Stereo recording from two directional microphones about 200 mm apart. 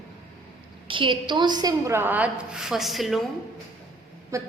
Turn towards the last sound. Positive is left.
turn(degrees=-15)  # may be behind; listen again after turning